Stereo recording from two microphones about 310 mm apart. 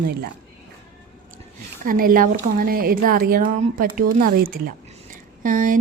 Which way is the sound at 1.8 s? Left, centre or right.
Right.